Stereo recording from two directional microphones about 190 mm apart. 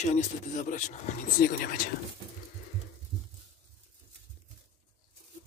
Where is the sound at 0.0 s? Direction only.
40° left (ahead or behind).